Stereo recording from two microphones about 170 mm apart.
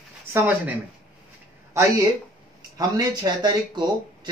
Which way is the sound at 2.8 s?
25° right (ahead or behind).